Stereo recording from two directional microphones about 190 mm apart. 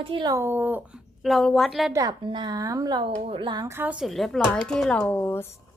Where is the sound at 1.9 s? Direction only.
20° right (ahead or behind); by 5.5 s 10° left (ahead or behind).